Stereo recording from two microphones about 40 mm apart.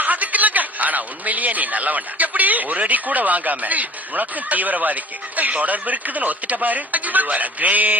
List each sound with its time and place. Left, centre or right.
0.0 s a man's voice: right